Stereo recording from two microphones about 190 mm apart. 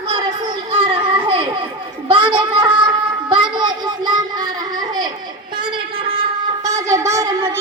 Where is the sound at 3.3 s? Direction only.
25° right (ahead or behind).